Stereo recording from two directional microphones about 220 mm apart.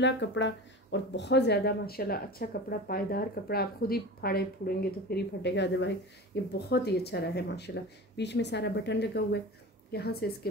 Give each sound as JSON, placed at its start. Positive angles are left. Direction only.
{"t": 0.0, "sound": "a woman's voice", "side_deg": 55}